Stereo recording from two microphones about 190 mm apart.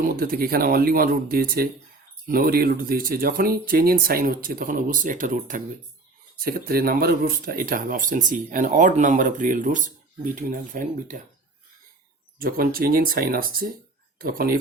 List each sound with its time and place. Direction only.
0.0 s speech: 50° right (ahead or behind)
12.4 s speech: 50° right (ahead or behind)